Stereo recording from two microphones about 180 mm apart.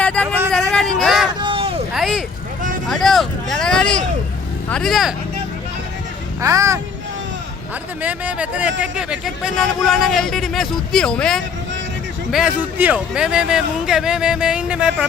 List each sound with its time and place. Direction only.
0.0 s vehicle: 5° left (ahead or behind)
0.7 s hubbub: centre (ahead or behind)
1.3 s a sound: 25° right (ahead or behind)
1.9 s vehicle: centre (ahead or behind)
4.7 s speech: centre (ahead or behind)
6.4 s speech: 15° right (ahead or behind)
8.0 s speech: 10° right (ahead or behind)